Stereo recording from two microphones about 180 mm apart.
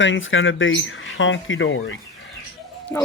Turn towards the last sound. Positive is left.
turn(degrees=15)  # may be behind; listen again after turning